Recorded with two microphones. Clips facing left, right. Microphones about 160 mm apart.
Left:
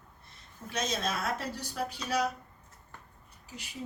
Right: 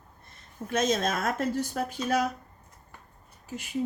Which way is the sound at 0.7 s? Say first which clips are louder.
Right 7 dB; 50° right (ahead or behind).